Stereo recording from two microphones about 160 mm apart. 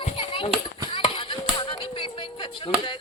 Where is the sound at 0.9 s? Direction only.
30° left (ahead or behind).